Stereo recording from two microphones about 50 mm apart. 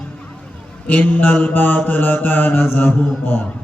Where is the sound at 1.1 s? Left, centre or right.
Left.